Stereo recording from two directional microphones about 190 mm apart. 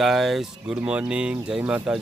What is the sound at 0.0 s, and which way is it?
Speech, centre (ahead or behind).